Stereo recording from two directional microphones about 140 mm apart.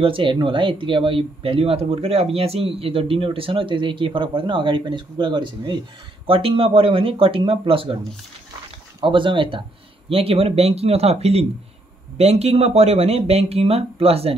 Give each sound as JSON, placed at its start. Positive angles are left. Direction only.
{"t": 0.0, "sound": "speech", "side_deg": -40}
{"t": 9.0, "sound": "speech", "side_deg": -35}